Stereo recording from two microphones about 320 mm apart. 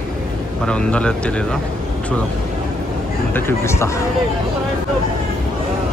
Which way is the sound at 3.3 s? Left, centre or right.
Centre.